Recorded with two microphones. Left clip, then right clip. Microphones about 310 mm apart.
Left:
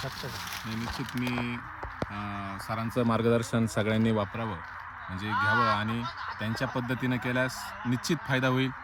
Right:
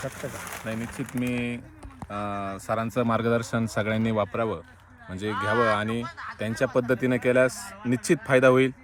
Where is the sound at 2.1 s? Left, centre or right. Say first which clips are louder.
Right 5 dB; centre.